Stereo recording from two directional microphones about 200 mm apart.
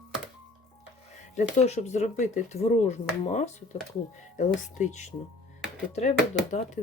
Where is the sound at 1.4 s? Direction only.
35° left (ahead or behind).